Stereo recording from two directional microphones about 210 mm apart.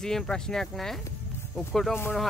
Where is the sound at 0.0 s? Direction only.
5° left (ahead or behind).